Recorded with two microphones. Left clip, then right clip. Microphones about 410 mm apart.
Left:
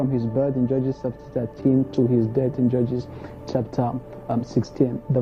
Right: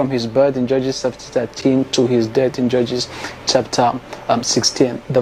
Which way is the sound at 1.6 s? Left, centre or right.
Right.